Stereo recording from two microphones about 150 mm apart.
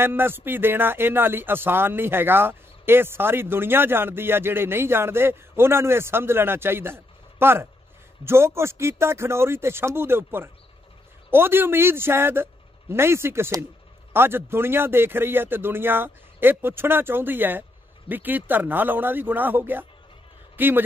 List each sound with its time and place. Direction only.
0.0 s a man's voice: 15° right (ahead or behind)